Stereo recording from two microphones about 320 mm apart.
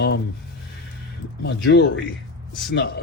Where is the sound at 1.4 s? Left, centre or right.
Left.